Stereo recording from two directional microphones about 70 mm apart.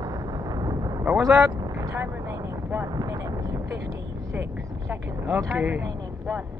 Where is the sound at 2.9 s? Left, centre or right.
Right.